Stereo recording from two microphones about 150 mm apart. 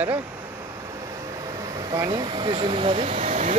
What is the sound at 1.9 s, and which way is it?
Speech, 25° right (ahead or behind).